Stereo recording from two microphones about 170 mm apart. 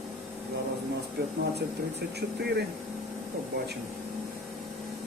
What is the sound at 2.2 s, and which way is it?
Speech, 75° right (ahead or behind).